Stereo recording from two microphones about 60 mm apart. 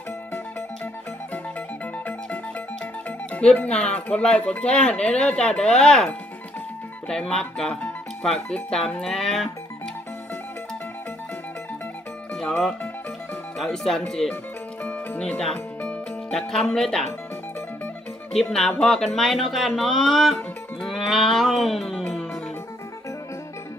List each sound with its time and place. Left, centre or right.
3.3 s speech: left
12.4 s speech: centre
18.3 s speech: centre
20.8 s music: centre